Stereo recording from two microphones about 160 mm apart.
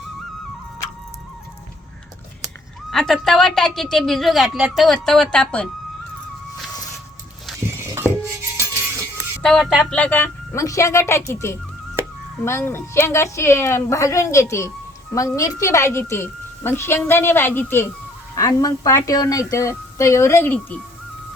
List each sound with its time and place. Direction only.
2.9 s a woman's voice: centre (ahead or behind)
8.5 s music: 15° right (ahead or behind)
9.4 s a woman's voice: 5° left (ahead or behind)